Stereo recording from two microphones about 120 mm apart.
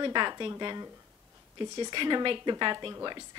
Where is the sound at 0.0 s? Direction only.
40° right (ahead or behind).